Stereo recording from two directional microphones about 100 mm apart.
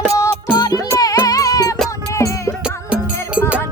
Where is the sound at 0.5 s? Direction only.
40° left (ahead or behind).